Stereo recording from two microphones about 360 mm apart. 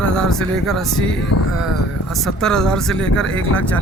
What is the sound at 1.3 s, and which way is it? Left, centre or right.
Speech, left.